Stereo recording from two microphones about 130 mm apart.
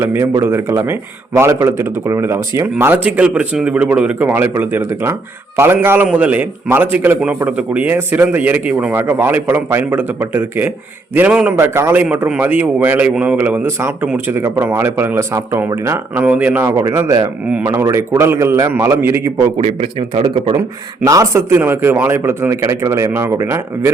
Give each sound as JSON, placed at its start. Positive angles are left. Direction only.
{"t": 0.0, "sound": "a man's voice", "side_deg": -20}
{"t": 19.5, "sound": "a man's voice", "side_deg": -50}
{"t": 20.6, "sound": "a man's voice", "side_deg": -25}